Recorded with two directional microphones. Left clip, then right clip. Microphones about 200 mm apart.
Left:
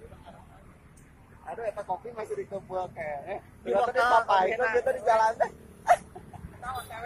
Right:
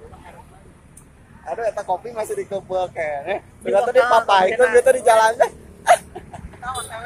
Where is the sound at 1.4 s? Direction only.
40° right (ahead or behind).